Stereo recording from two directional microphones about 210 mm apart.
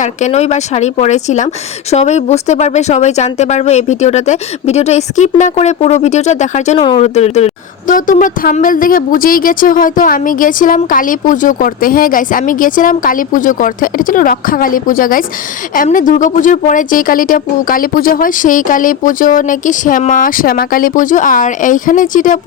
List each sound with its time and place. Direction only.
0.0 s speech: 35° left (ahead or behind)